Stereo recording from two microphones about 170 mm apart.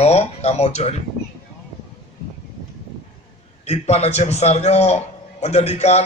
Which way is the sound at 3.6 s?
40° left (ahead or behind).